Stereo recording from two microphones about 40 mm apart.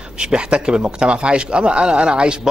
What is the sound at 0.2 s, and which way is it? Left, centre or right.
A man's voice, right.